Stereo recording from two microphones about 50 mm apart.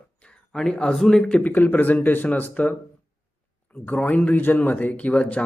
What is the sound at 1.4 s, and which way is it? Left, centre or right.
Speech, left.